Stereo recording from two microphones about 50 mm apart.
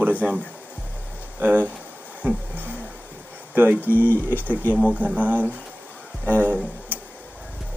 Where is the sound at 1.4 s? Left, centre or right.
Right.